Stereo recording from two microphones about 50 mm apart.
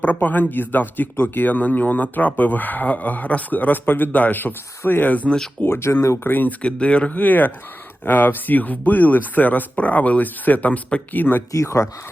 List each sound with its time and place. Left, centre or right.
0.0 s speech: left
5.6 s speech: left
6.2 s speech: left
6.6 s speech: left
11.5 s speech: left